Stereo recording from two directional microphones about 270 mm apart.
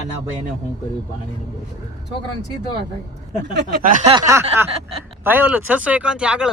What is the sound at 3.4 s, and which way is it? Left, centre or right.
Speech, right.